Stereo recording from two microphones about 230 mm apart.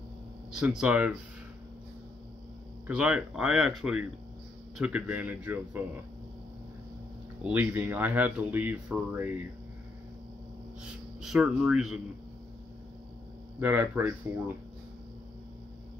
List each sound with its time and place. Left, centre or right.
0.5 s speech: centre
2.9 s speech: centre
7.4 s speech: centre
10.9 s speech: centre
13.6 s speech: centre